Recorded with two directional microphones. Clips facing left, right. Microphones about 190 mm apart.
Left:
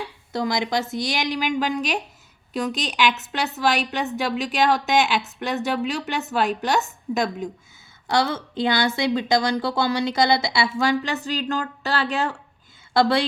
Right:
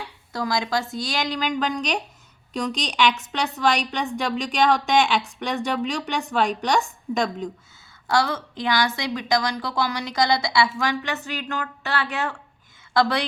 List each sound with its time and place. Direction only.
0.3 s a woman's voice: 20° left (ahead or behind)
8.0 s a woman's voice: 20° left (ahead or behind)